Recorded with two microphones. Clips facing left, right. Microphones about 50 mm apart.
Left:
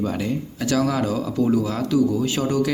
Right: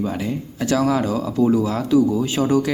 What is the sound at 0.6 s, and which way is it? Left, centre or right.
Speech, right.